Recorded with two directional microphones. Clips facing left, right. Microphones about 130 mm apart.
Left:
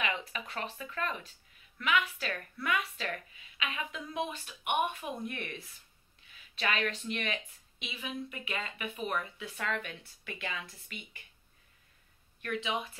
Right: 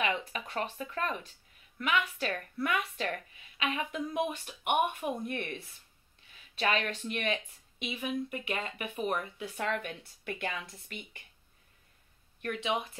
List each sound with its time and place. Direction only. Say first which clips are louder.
0.0 s a woman's voice: right 3 dB; 40° right (ahead or behind)
6.6 s a woman's voice: right 2 dB; 35° right (ahead or behind); by 11.0 s 50° right (ahead or behind)